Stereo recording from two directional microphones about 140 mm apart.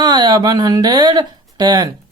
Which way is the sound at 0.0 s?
30° right (ahead or behind).